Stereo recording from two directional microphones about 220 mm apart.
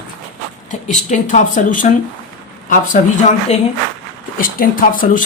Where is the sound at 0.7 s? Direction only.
35° left (ahead or behind).